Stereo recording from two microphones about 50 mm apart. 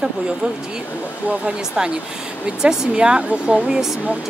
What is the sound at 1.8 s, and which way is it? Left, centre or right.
Speech, centre.